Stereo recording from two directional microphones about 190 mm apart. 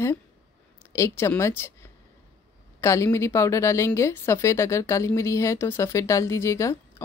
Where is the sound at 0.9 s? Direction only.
15° left (ahead or behind).